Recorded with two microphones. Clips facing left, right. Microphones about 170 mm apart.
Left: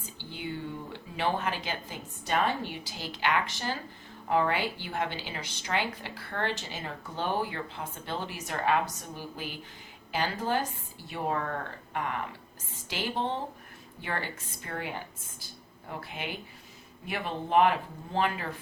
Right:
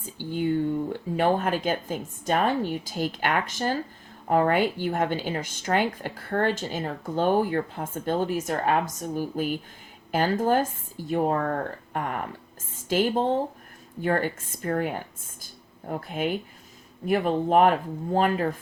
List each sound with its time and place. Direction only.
0.2 s a sound: 50° right (ahead or behind)
1.1 s speech: 50° right (ahead or behind)
15.9 s speech: 45° right (ahead or behind)